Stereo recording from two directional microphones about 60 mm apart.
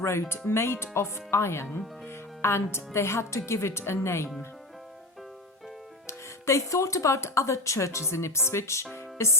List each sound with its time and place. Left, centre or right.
0.0 s a woman's voice: left
6.1 s speech: left
8.9 s music: left